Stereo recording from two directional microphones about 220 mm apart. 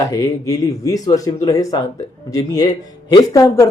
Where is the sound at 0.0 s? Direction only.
15° left (ahead or behind).